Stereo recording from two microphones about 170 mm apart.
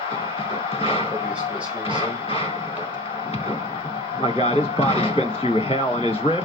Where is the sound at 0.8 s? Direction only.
35° left (ahead or behind).